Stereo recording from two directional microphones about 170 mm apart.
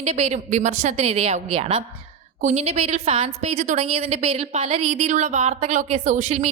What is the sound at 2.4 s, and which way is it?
A woman's voice, 45° right (ahead or behind).